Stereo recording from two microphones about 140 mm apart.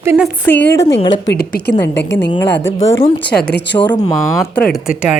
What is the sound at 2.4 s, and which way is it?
A woman's voice, 15° left (ahead or behind).